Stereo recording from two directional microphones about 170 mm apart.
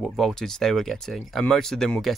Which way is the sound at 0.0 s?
Centre (ahead or behind).